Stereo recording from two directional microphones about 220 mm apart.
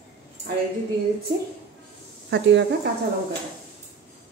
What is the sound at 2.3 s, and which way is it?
Speech, 55° right (ahead or behind).